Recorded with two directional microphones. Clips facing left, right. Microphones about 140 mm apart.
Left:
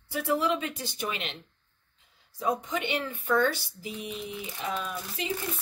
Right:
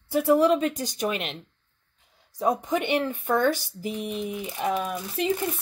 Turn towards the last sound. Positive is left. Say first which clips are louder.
# right 6 dB
turn(degrees=-55)  # may be behind; listen again after turning